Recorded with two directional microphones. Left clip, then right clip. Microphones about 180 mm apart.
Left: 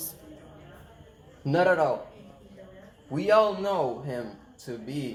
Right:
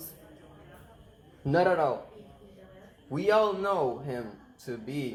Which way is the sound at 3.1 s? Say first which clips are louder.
Left 3 dB; 30° right (ahead or behind).